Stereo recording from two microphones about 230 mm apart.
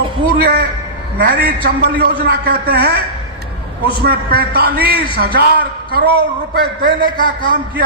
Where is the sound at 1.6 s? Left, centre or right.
Right.